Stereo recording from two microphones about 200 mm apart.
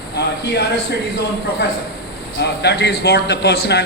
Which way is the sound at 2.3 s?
55° left (ahead or behind).